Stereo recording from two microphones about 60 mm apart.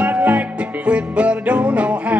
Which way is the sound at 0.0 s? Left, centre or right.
Right.